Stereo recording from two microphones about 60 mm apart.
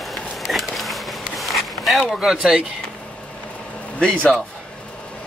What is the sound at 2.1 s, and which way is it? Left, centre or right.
Speech, centre.